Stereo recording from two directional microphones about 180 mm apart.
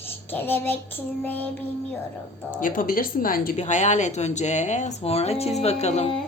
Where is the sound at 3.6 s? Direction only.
40° left (ahead or behind).